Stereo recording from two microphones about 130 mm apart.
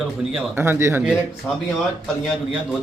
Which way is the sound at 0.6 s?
20° right (ahead or behind).